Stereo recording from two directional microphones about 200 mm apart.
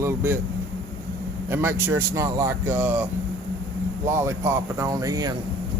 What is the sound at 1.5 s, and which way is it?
A man's voice, 10° right (ahead or behind).